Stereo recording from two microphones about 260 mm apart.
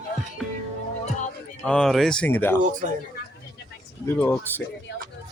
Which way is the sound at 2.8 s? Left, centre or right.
Right.